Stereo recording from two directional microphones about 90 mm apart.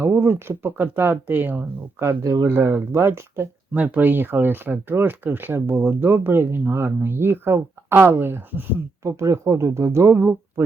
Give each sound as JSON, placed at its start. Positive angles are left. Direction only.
{"t": 0.0, "sound": "speech", "side_deg": -25}
{"t": 2.2, "sound": "speech", "side_deg": -40}
{"t": 2.5, "sound": "speech", "side_deg": -25}
{"t": 9.0, "sound": "speech", "side_deg": -35}